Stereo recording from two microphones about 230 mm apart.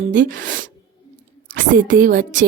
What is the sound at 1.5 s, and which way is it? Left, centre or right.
Speech, right.